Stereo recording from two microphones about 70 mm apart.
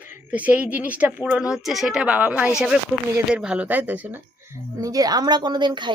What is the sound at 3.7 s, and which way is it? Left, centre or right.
Speech, right.